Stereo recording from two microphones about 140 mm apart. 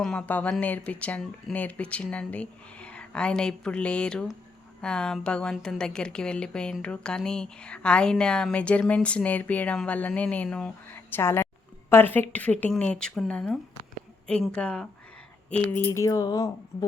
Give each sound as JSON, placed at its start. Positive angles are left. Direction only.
{"t": 0.0, "sound": "a woman's voice", "side_deg": 5}